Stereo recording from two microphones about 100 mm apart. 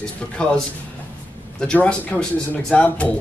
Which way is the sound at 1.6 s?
10° left (ahead or behind).